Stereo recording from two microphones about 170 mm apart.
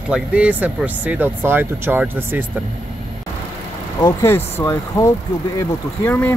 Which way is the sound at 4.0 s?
15° left (ahead or behind).